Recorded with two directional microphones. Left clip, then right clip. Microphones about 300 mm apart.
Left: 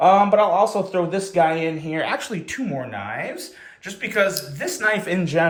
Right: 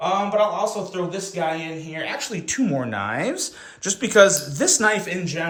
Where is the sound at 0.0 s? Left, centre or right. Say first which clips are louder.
Left 6 dB; centre.